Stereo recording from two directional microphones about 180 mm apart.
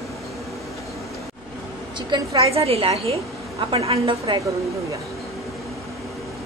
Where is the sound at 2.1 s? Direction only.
30° right (ahead or behind).